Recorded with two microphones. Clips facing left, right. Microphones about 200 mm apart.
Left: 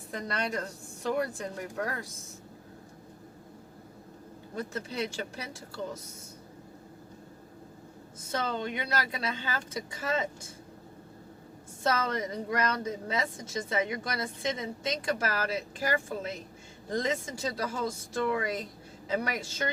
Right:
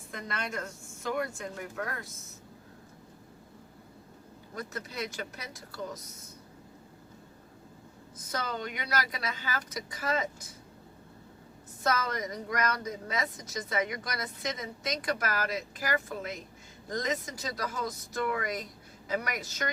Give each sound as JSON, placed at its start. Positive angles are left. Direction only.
{"t": 0.1, "sound": "a woman's voice", "side_deg": 35}
{"t": 4.5, "sound": "speech", "side_deg": 30}
{"t": 8.3, "sound": "speech", "side_deg": 25}
{"t": 11.8, "sound": "speech", "side_deg": 30}